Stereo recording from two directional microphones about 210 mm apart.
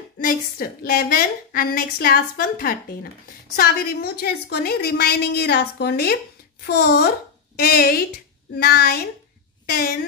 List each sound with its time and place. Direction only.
0.2 s a woman's voice: 45° left (ahead or behind)